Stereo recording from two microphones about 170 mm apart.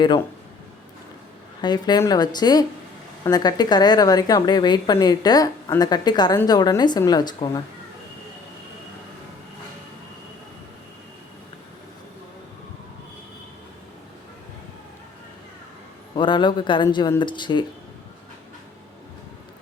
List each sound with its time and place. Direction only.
1.6 s a woman's voice: 25° left (ahead or behind)
16.1 s a woman's voice: 30° left (ahead or behind)